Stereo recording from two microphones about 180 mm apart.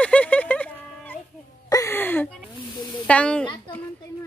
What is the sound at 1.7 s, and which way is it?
Speech, 15° left (ahead or behind).